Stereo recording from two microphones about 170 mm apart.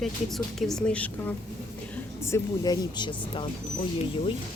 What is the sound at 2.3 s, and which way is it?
Speech, 20° left (ahead or behind).